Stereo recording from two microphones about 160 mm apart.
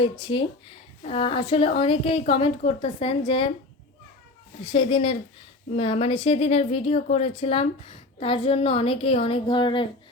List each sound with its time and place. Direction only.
0.0 s speech: 30° left (ahead or behind)
4.7 s speech: 35° left (ahead or behind)